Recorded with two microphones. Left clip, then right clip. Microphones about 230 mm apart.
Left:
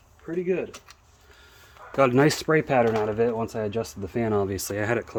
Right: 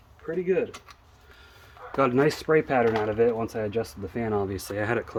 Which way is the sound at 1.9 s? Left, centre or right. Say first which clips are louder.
Left 3 dB; left.